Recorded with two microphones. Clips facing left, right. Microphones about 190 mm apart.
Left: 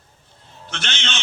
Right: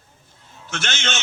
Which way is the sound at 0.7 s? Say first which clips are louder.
Right 3 dB; 45° right (ahead or behind).